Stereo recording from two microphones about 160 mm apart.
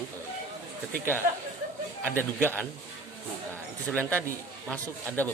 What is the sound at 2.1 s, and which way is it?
Speech, 15° left (ahead or behind).